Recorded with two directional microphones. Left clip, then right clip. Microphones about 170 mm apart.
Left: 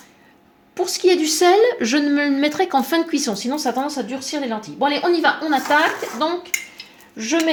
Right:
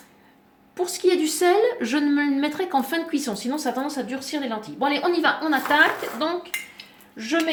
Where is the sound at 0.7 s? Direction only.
40° left (ahead or behind).